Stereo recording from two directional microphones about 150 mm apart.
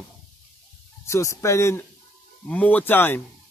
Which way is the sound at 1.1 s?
20° left (ahead or behind).